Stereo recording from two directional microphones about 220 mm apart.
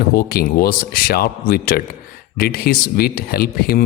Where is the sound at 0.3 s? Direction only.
45° left (ahead or behind).